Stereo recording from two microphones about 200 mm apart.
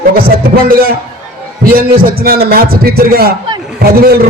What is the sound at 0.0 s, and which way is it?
A man's voice, 45° right (ahead or behind).